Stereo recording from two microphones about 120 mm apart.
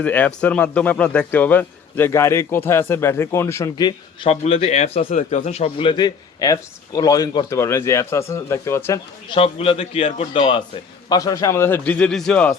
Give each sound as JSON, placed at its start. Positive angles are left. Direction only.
{"t": 0.0, "sound": "speech", "side_deg": 10}
{"t": 3.8, "sound": "speech", "side_deg": 35}
{"t": 4.3, "sound": "speech", "side_deg": 60}
{"t": 9.3, "sound": "a man's voice", "side_deg": 50}
{"t": 11.1, "sound": "speech", "side_deg": 30}